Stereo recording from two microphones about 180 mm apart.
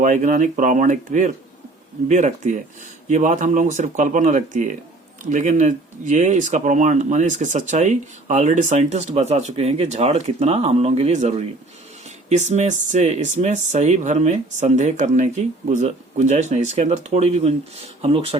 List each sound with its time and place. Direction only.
0.0 s speech: 45° right (ahead or behind)